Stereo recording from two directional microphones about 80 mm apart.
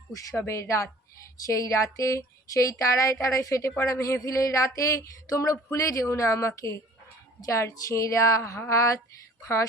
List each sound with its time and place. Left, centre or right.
0.1 s speech: left